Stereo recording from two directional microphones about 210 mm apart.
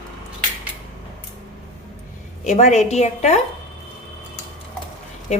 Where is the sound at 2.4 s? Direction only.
35° left (ahead or behind).